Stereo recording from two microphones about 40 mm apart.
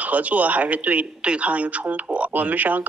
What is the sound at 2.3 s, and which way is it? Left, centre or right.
Speech, right.